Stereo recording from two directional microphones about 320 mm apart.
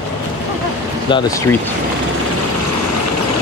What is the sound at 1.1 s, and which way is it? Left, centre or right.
Speech, centre.